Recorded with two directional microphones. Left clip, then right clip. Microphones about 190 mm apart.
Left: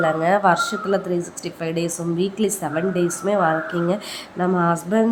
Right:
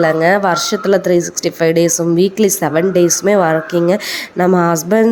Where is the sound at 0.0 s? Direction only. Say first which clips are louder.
Right 6 dB; 25° right (ahead or behind).